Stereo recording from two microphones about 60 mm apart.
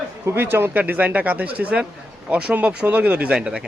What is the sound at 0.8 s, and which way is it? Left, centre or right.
Speech, right.